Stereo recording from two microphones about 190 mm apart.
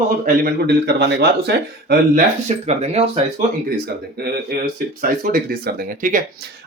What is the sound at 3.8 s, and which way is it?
Speech, 55° right (ahead or behind).